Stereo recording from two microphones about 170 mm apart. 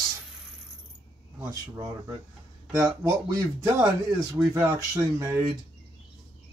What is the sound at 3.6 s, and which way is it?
Speech, 15° right (ahead or behind).